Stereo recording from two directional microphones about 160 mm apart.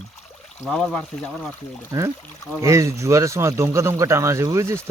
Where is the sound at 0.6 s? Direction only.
Centre (ahead or behind).